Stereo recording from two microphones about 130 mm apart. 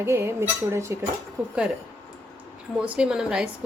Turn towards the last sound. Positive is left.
turn(degrees=-5)  # may be behind; listen again after turning